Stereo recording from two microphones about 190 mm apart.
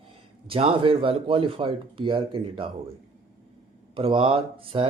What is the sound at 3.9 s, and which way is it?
Speech, 30° right (ahead or behind).